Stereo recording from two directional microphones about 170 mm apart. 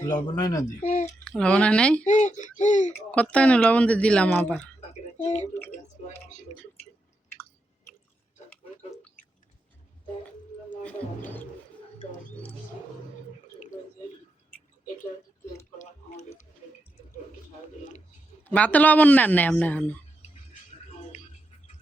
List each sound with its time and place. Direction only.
0.0 s speech: 20° left (ahead or behind)
1.2 s speech: 5° left (ahead or behind)
2.0 s speech: 45° left (ahead or behind)
3.1 s speech: 10° left (ahead or behind)
5.2 s speech: 40° left (ahead or behind)
18.4 s speech: 10° left (ahead or behind)